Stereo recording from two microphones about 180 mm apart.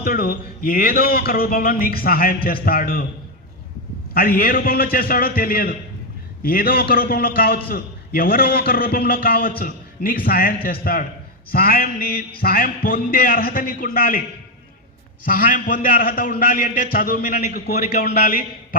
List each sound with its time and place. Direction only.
0.0 s a man's voice: 55° left (ahead or behind)
4.1 s a man's voice: 55° left (ahead or behind)
15.3 s a man's voice: 50° left (ahead or behind)